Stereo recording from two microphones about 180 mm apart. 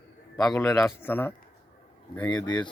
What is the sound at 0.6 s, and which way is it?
Speech, 20° left (ahead or behind).